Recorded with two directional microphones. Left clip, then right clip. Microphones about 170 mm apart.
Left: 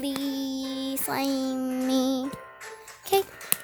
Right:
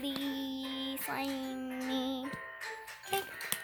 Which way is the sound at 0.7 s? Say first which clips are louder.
Left 6 dB; 70° left (ahead or behind).